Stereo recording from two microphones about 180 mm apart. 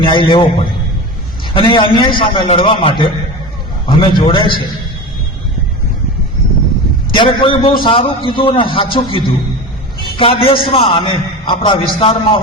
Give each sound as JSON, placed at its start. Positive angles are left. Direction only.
{"t": 0.0, "sound": "a man's voice", "side_deg": 25}
{"t": 1.5, "sound": "a man's voice", "side_deg": 30}
{"t": 7.2, "sound": "a man's voice", "side_deg": 25}